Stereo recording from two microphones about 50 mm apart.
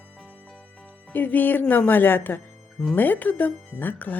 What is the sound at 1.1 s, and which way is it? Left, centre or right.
Speech, left.